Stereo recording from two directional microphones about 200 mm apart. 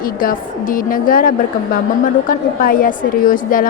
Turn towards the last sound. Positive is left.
turn(degrees=45)  # may be behind; listen again after turning